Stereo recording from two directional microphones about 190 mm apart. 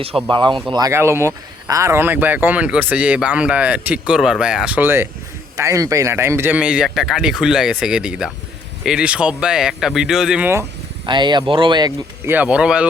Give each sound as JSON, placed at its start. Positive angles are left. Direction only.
{"t": 0.3, "sound": "a man's voice", "side_deg": -25}
{"t": 11.0, "sound": "speech", "side_deg": -25}